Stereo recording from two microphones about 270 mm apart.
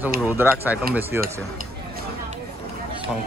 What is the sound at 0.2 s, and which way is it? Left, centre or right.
Speech, centre.